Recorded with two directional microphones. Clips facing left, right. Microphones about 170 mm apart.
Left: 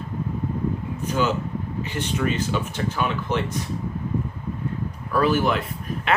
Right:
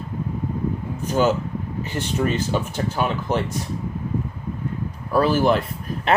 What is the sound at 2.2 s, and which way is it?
Speech, 40° right (ahead or behind).